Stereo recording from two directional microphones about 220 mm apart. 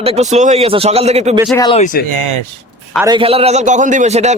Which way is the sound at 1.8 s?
35° left (ahead or behind).